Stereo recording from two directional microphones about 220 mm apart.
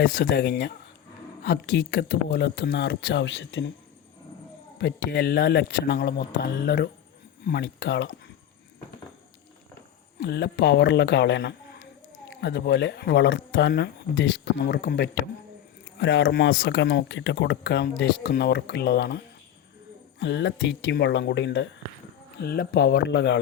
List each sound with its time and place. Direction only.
0.0 s speech: 55° left (ahead or behind)
4.8 s speech: 45° left (ahead or behind)
10.2 s speech: 50° left (ahead or behind)